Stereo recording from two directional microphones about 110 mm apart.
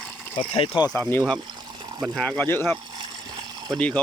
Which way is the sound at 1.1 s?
15° left (ahead or behind).